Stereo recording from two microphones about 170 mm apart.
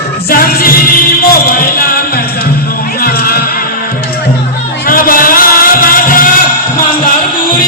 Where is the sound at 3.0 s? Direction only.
60° left (ahead or behind).